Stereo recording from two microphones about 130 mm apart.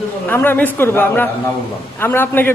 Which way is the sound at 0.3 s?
15° left (ahead or behind).